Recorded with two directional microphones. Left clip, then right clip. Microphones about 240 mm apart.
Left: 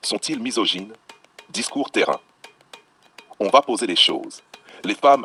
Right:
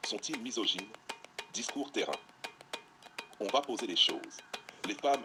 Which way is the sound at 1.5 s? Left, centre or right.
Left.